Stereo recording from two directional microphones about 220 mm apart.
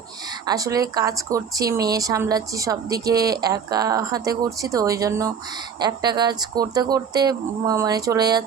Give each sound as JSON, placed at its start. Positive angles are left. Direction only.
{"t": 0.4, "sound": "speech", "side_deg": -15}